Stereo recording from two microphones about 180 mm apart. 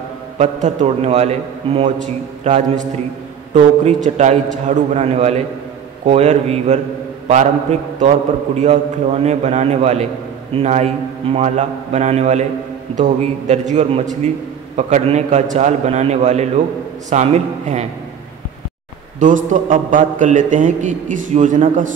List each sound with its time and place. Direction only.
0.4 s a man's voice: 40° right (ahead or behind)
19.1 s a man's voice: 45° right (ahead or behind)